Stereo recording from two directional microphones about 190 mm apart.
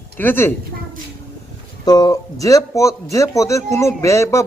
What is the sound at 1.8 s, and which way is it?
A man's voice, 20° left (ahead or behind).